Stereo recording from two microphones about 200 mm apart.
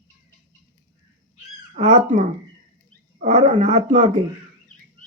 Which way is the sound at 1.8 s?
35° right (ahead or behind).